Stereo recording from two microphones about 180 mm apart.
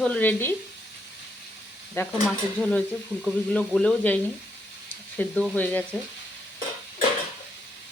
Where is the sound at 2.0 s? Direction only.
15° left (ahead or behind).